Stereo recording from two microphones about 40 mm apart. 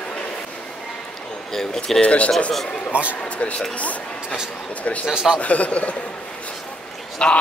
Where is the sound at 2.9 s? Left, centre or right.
Right.